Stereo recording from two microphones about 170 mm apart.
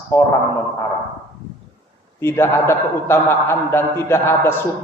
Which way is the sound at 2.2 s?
15° left (ahead or behind).